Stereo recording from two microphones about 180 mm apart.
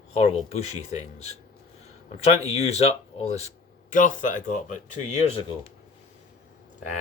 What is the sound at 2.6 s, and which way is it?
Speech, 35° left (ahead or behind).